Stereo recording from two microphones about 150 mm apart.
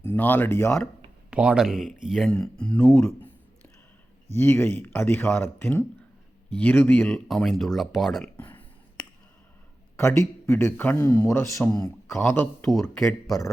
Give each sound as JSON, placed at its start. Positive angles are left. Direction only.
{"t": 0.0, "sound": "speech", "side_deg": 15}
{"t": 1.3, "sound": "speech", "side_deg": -5}
{"t": 4.4, "sound": "speech", "side_deg": 15}
{"t": 7.1, "sound": "speech", "side_deg": 0}
{"t": 8.4, "sound": "a sound", "side_deg": 10}
{"t": 10.0, "sound": "speech", "side_deg": 15}
{"t": 13.0, "sound": "speech", "side_deg": 0}